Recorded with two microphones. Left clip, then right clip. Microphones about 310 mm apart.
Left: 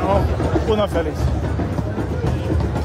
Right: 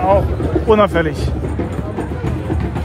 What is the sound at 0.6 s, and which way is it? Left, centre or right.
Speech, right.